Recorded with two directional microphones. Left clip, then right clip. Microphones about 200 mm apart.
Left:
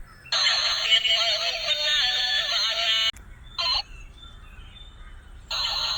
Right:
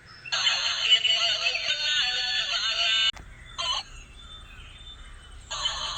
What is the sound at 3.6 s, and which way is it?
Fowl, 10° left (ahead or behind).